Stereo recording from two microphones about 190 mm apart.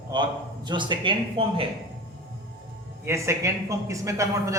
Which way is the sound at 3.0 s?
15° right (ahead or behind).